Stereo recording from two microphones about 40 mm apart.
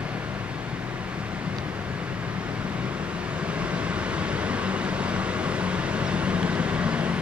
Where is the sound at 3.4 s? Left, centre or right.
Right.